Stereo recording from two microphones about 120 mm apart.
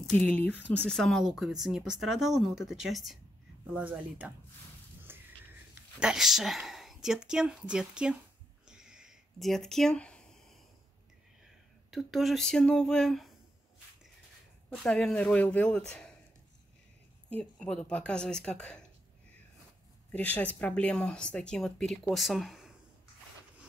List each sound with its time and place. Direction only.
0.0 s speech: 5° left (ahead or behind)
3.7 s speech: 15° right (ahead or behind)
5.0 s a sound: 15° right (ahead or behind)
6.0 s speech: 5° right (ahead or behind)
8.6 s a sound: 5° right (ahead or behind)
11.9 s speech: centre (ahead or behind)
14.8 s speech: 10° left (ahead or behind)
17.3 s speech: 10° left (ahead or behind)
20.1 s speech: 10° left (ahead or behind)